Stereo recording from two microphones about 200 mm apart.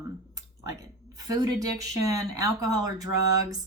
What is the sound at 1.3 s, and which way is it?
Speech, 15° right (ahead or behind).